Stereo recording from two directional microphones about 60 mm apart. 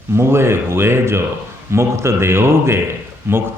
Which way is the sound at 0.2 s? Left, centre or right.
Right.